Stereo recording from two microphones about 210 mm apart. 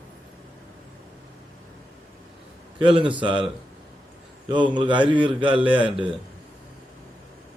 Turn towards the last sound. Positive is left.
turn(degrees=-25)  # may be behind; listen again after turning